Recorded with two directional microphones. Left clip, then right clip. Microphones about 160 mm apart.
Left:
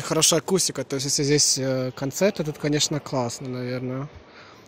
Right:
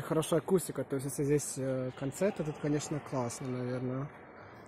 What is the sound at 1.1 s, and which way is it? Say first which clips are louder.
Speech: left 12 dB; 50° left (ahead or behind).